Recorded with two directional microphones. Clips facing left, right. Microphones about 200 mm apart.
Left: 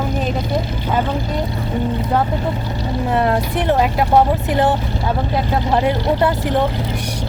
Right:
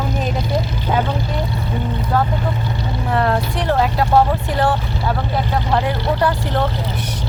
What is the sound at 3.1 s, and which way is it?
A woman's voice, 20° left (ahead or behind).